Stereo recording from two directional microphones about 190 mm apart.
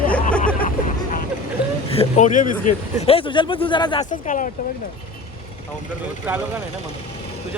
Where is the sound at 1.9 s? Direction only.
35° left (ahead or behind).